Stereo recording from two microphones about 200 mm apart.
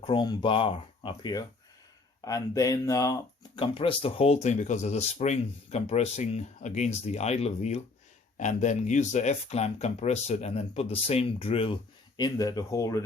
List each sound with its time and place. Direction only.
0.0 s speech: 25° left (ahead or behind)